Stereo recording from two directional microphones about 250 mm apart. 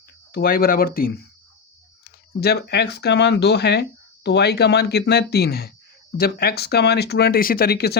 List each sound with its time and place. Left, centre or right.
0.3 s speech: left